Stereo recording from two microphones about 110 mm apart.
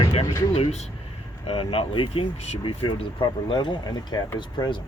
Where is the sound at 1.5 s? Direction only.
60° left (ahead or behind).